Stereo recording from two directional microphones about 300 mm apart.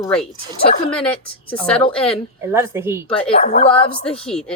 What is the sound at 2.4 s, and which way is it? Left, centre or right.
Speech, centre.